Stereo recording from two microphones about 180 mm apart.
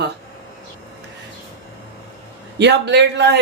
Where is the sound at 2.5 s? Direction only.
75° right (ahead or behind).